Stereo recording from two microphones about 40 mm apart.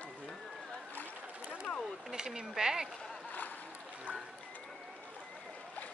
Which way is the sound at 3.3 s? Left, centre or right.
Left.